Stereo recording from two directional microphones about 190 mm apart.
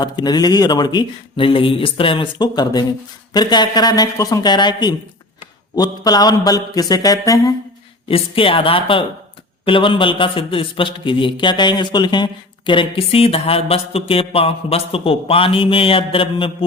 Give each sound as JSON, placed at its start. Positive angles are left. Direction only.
{"t": 0.0, "sound": "a man's voice", "side_deg": 20}
{"t": 8.0, "sound": "a man's voice", "side_deg": 30}